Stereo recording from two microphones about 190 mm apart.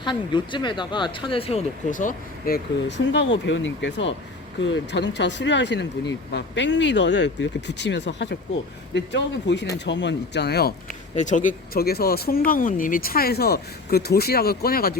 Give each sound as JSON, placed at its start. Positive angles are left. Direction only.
{"t": 0.0, "sound": "speech", "side_deg": 25}
{"t": 1.9, "sound": "speech", "side_deg": 45}
{"t": 3.1, "sound": "speech", "side_deg": 70}
{"t": 11.1, "sound": "speech", "side_deg": 40}